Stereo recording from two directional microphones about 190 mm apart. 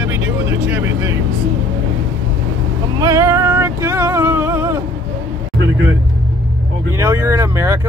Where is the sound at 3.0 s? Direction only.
15° right (ahead or behind).